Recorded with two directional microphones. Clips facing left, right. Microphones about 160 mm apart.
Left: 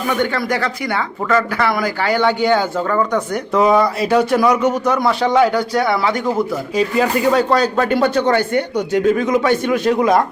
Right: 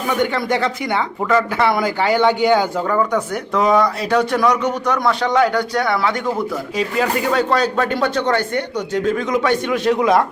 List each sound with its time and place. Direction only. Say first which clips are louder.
0.1 s speech: right 1 dB; 15° right (ahead or behind)
3.0 s speech: left 1 dB; centre (ahead or behind)